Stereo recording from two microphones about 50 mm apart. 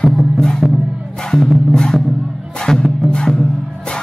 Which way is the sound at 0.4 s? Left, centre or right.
Centre.